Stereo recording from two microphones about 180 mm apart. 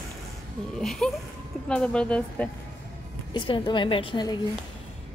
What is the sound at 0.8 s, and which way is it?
Speech, 5° left (ahead or behind).